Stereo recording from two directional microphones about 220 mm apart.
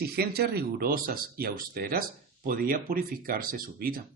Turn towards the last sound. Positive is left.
turn(degrees=-40)  # may be behind; listen again after turning